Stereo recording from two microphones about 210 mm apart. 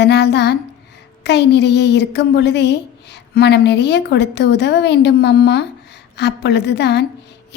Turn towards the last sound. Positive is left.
turn(degrees=55)  # may be behind; listen again after turning